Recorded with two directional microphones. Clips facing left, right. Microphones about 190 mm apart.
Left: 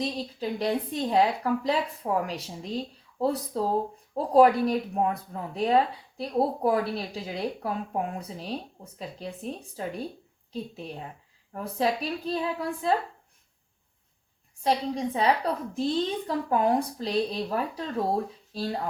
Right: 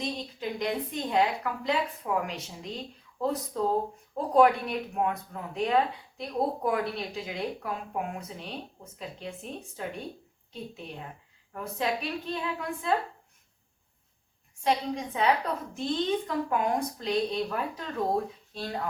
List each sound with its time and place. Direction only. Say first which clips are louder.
0.0 s a woman's voice: left 3 dB; 35° left (ahead or behind)
14.6 s a woman's voice: left 2 dB; 35° left (ahead or behind)